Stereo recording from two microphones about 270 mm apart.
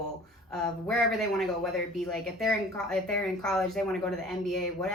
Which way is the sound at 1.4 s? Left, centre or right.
Centre.